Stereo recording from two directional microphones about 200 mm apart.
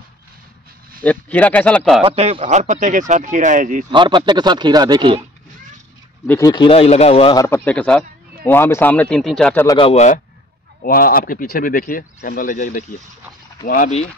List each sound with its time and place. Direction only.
1.0 s speech: 5° left (ahead or behind)
2.0 s speech: 30° right (ahead or behind)
3.9 s speech: 25° right (ahead or behind)
6.2 s speech: 10° left (ahead or behind)
6.5 s speech: 25° left (ahead or behind)
7.4 s speech: 10° left (ahead or behind)
9.7 s speech: 25° left (ahead or behind)
10.8 s speech: 45° left (ahead or behind)